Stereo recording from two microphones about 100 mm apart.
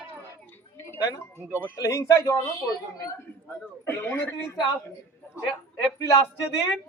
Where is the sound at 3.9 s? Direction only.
20° left (ahead or behind).